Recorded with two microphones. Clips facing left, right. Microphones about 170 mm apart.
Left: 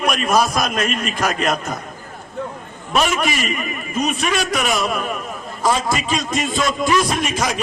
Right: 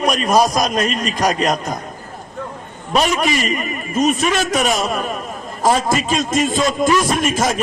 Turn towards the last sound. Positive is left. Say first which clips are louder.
# right 3 dB
turn(degrees=-45)  # may be behind; listen again after turning